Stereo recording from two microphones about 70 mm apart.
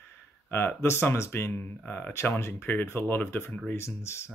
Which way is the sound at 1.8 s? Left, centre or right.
Left.